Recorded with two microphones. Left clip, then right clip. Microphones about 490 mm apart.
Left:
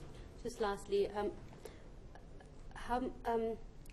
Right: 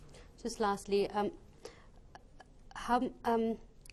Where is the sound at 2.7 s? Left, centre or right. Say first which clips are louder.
Right 6 dB; right.